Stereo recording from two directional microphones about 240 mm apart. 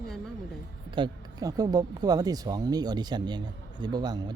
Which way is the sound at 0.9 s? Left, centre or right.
Centre.